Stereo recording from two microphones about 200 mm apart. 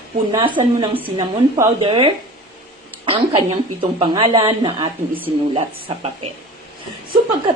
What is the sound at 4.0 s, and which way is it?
A woman's voice, 25° right (ahead or behind).